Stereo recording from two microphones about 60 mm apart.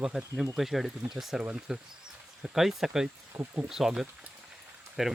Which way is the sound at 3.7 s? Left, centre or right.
Centre.